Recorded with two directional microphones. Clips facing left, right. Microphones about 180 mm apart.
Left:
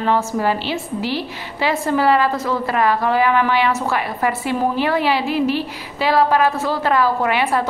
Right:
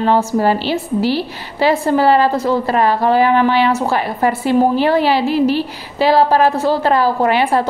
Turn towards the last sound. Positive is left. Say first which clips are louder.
# right 4 dB
turn(degrees=-30)  # may be behind; listen again after turning